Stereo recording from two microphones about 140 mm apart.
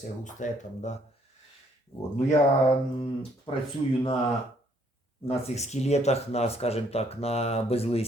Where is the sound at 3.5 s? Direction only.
40° left (ahead or behind).